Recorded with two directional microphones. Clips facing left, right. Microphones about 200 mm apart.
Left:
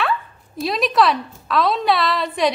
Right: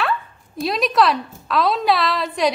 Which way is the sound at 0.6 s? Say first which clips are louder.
Even; centre (ahead or behind).